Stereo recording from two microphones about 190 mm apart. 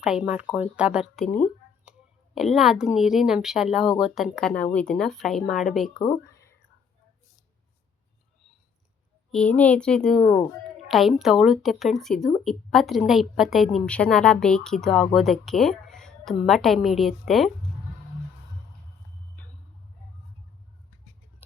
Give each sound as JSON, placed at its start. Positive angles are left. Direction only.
{"t": 0.0, "sound": "speech", "side_deg": -5}
{"t": 9.3, "sound": "speech", "side_deg": 5}